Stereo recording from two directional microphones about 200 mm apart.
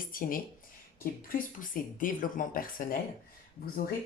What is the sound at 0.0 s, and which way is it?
Speech, 45° left (ahead or behind).